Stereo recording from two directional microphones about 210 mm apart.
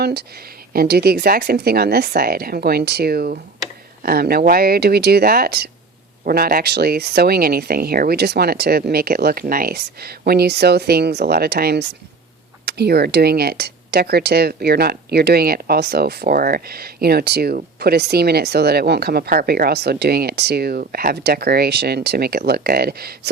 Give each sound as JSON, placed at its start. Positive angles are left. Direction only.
{"t": 0.0, "sound": "speech", "side_deg": -50}